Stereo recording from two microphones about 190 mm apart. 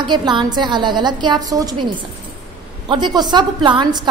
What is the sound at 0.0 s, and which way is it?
A woman's voice, 25° right (ahead or behind).